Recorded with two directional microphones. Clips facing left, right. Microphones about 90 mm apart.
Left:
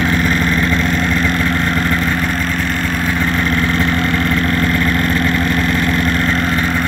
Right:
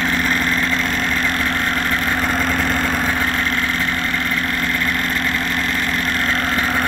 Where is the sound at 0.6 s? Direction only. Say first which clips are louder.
Left 4 dB; 40° left (ahead or behind).